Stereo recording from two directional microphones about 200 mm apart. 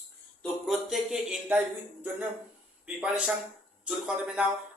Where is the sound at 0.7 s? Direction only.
Centre (ahead or behind).